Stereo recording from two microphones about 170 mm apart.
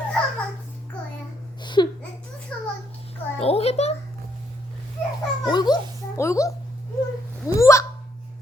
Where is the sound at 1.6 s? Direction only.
25° left (ahead or behind).